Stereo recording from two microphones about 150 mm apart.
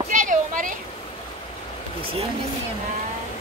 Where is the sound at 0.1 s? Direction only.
60° right (ahead or behind).